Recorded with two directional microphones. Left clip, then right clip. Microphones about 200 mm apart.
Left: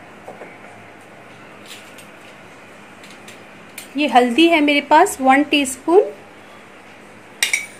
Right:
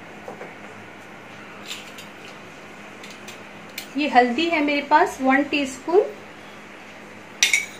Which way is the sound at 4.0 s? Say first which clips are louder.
Left 5 dB; 50° left (ahead or behind).